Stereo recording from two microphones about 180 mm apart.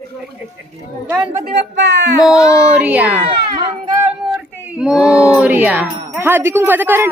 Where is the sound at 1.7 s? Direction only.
80° right.